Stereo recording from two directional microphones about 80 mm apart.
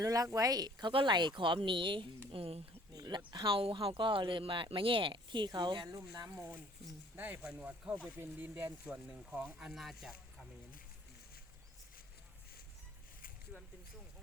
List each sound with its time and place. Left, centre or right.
0.0 s speech: right
3.1 s speech: right
6.3 s speech: right
8.2 s speech: right; by 10.2 s centre
13.5 s a sound: centre